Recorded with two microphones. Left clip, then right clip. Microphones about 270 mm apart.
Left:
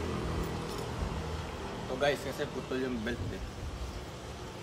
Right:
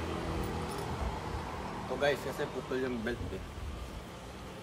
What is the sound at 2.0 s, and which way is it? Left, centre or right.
Speech, centre.